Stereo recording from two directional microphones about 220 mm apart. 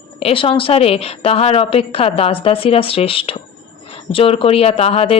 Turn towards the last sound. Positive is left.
turn(degrees=25)  # may be behind; listen again after turning